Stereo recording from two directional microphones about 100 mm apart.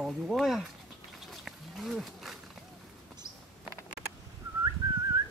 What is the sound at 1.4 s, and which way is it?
Wild animals, centre (ahead or behind).